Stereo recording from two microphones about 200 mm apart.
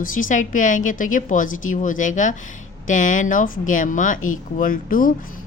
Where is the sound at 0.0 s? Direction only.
40° left (ahead or behind).